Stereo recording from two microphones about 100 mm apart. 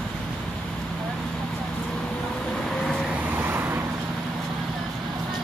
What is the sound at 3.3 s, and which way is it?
Vehicle, 20° right (ahead or behind).